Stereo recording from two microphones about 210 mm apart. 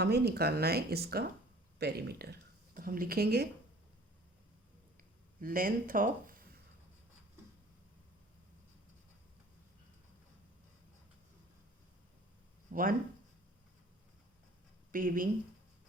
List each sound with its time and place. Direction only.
0.0 s speech: 50° right (ahead or behind)
5.4 s speech: 40° right (ahead or behind)
12.7 s speech: 40° right (ahead or behind)
14.9 s speech: 40° right (ahead or behind)